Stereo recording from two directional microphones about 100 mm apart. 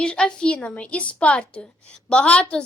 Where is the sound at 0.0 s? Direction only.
10° left (ahead or behind).